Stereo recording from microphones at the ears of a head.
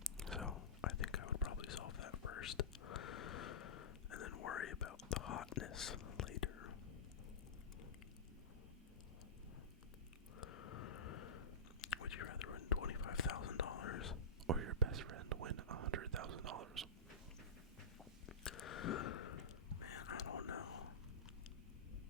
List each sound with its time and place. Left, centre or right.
0.5 s whispering: left
10.3 s chewing: left
14.4 s whispering: right
18.3 s a sound: left